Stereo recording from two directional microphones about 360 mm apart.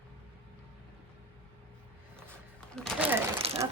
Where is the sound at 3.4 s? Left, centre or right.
Centre.